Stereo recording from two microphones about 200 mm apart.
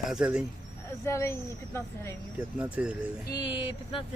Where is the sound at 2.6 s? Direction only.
5° right (ahead or behind).